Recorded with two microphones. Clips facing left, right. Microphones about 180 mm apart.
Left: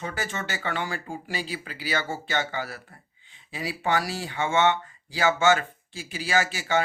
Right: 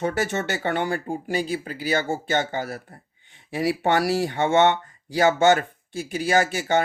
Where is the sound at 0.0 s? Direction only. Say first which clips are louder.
Right 8 dB; 65° right (ahead or behind).